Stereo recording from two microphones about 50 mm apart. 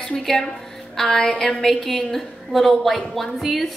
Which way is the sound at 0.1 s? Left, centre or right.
Centre.